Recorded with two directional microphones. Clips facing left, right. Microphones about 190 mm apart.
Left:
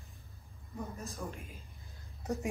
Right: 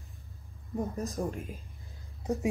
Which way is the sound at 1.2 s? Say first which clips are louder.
Right 9 dB; 45° right (ahead or behind).